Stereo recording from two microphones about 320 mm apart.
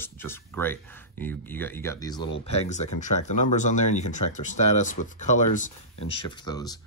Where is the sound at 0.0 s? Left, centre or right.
Centre.